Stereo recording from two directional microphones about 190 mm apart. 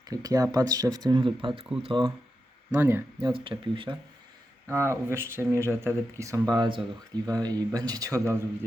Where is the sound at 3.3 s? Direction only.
25° right (ahead or behind).